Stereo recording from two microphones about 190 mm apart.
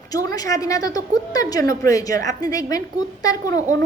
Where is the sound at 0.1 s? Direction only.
20° left (ahead or behind).